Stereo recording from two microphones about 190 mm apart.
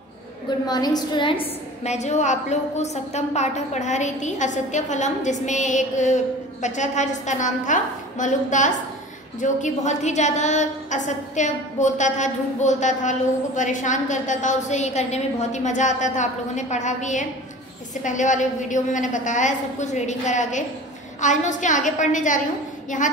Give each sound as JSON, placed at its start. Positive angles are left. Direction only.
{"t": 0.7, "sound": "a woman's voice", "side_deg": 20}